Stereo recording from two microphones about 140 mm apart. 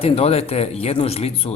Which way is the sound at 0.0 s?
45° left (ahead or behind).